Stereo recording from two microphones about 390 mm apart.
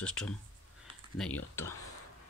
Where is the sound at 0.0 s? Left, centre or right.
Centre.